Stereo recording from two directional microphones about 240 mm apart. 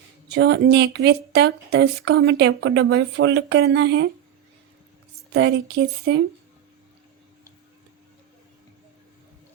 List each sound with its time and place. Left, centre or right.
0.3 s speech: right
5.3 s speech: right